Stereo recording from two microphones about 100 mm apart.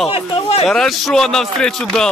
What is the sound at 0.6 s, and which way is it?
Speech, centre (ahead or behind).